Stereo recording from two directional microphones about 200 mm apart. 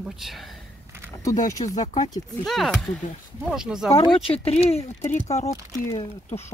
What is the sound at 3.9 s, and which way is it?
Speech, 25° left (ahead or behind).